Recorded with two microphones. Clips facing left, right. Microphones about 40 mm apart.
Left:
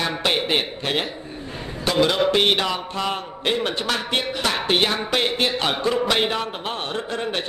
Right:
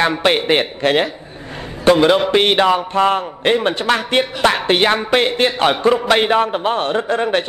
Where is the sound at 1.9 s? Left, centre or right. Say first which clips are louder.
Right 3 dB; right.